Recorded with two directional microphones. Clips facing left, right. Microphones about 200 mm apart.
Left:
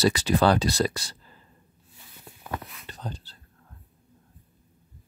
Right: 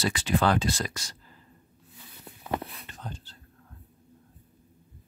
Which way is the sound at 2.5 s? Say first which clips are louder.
Right 4 dB; 30° right (ahead or behind).